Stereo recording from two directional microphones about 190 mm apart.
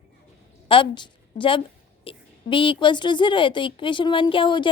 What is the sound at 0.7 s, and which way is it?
A woman's voice, 25° left (ahead or behind).